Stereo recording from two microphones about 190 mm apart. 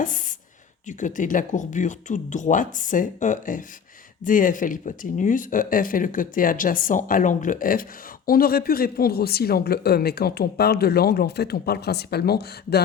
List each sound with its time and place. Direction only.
0.9 s speech: 40° left (ahead or behind); by 12.8 s 55° left (ahead or behind)